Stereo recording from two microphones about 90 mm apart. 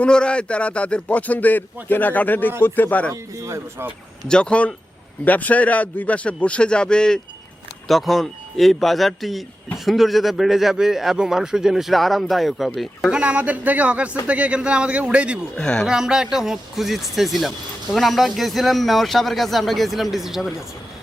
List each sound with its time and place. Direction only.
0.0 s a man's voice: 10° left (ahead or behind)
3.1 s speech: 35° right (ahead or behind)
4.3 s speech: 10° left (ahead or behind)
13.1 s a man's voice: 15° right (ahead or behind)
15.5 s speech: 10° left (ahead or behind)
15.9 s speech: 5° right (ahead or behind)